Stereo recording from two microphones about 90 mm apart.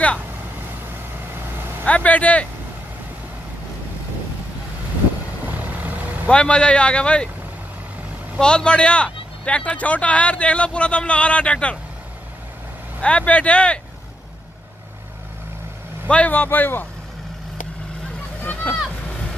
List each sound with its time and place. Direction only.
1.9 s speech: 15° left (ahead or behind)
5.4 s vehicle: 20° right (ahead or behind)
6.2 s speech: 10° left (ahead or behind)
8.4 s speech: 10° left (ahead or behind)
13.0 s speech: 15° left (ahead or behind)
16.1 s speech: 15° left (ahead or behind)
18.4 s a sound: 20° left (ahead or behind)